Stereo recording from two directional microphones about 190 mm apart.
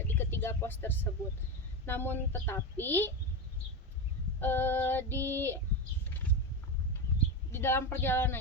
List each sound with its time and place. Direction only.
0.1 s a sound: 10° left (ahead or behind)
1.9 s female singing: 10° left (ahead or behind)
4.4 s female singing: 10° left (ahead or behind)
7.5 s female singing: 10° left (ahead or behind)